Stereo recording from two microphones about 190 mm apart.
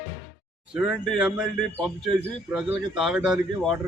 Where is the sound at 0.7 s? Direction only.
5° right (ahead or behind).